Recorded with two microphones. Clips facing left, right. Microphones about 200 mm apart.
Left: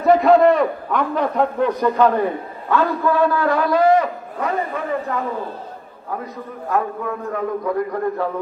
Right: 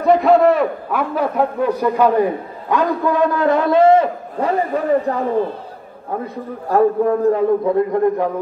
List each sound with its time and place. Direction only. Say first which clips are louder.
0.0 s a man's voice: even; centre (ahead or behind); by 5.2 s 35° right (ahead or behind)
6.2 s a man's voice: right 4 dB; 30° right (ahead or behind)